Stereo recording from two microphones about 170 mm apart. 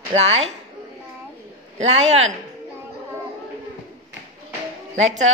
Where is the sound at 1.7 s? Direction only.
40° right (ahead or behind).